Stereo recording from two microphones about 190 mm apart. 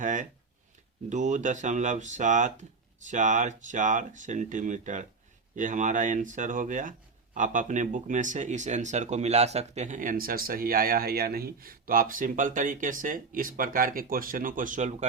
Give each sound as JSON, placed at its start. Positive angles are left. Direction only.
{"t": 0.0, "sound": "speech", "side_deg": -40}